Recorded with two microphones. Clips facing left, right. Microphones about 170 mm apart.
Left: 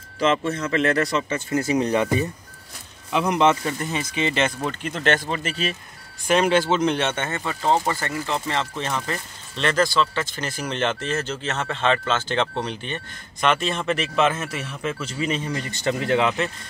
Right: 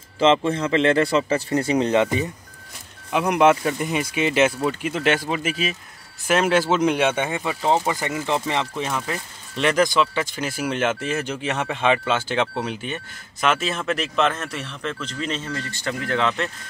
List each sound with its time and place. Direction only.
0.2 s speech: 30° right (ahead or behind); by 16.3 s 15° left (ahead or behind)